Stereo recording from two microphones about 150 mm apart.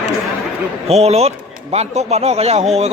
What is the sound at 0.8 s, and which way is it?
Speech, 45° right (ahead or behind).